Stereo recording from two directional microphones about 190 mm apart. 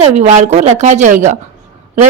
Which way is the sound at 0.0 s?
35° right (ahead or behind).